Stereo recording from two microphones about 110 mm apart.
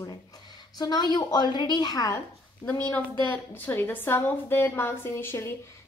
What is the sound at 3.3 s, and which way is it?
A woman's voice, 15° left (ahead or behind).